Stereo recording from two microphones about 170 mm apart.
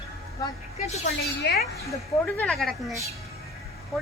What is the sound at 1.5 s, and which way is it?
Speech, 85° left.